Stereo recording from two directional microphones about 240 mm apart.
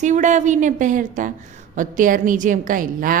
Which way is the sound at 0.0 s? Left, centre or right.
Right.